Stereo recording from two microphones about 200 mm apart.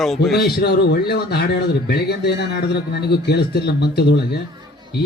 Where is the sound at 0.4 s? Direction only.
55° left (ahead or behind).